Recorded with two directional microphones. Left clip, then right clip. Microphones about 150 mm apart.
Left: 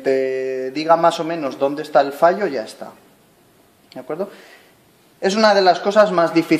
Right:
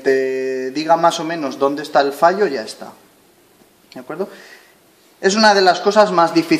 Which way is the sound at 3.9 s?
30° left (ahead or behind).